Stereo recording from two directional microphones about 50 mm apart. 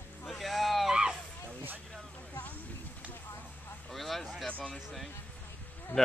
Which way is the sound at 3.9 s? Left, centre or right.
Centre.